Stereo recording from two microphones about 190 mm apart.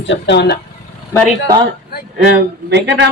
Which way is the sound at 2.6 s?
65° right (ahead or behind).